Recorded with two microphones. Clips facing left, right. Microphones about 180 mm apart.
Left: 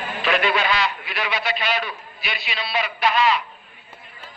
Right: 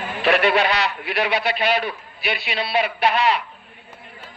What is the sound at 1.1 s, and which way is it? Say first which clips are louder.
A man's voice: right 5 dB; 65° right (ahead or behind).